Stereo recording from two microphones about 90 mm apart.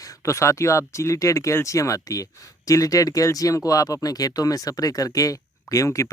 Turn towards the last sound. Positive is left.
turn(degrees=35)  # may be behind; listen again after turning